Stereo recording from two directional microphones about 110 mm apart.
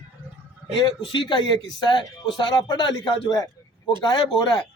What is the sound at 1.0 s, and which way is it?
A man's voice, 55° left (ahead or behind).